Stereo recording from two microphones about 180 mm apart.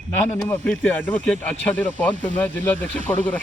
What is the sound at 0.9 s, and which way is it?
Speech, 5° left (ahead or behind).